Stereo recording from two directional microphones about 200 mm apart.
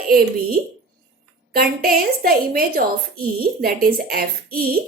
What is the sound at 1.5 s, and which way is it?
Speech, 50° right (ahead or behind).